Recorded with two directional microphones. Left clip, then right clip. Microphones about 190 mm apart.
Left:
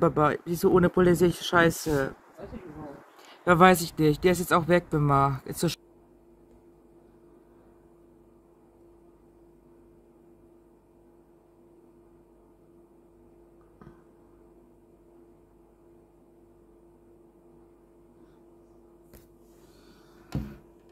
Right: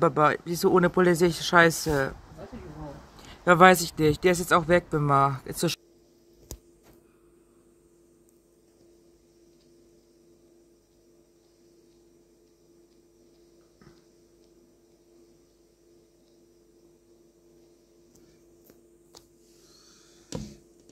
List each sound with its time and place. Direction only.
0.0 s speech: 5° left (ahead or behind)
3.2 s speech: centre (ahead or behind)